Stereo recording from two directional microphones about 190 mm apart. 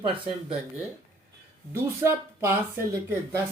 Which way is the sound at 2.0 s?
15° right (ahead or behind).